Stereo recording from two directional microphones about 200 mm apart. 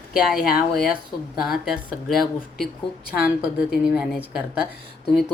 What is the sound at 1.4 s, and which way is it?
A woman's voice, centre (ahead or behind).